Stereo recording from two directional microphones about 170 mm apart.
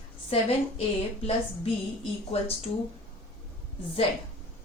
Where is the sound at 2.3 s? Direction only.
35° left (ahead or behind).